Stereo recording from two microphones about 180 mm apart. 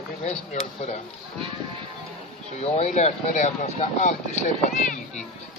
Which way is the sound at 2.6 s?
40° left (ahead or behind).